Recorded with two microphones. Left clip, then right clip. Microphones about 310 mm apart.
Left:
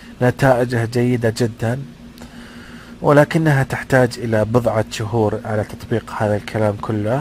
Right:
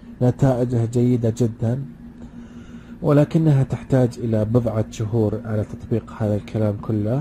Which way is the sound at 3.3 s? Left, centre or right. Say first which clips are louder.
Left 4 dB; left.